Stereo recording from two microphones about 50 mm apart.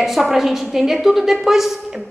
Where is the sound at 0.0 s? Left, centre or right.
Centre.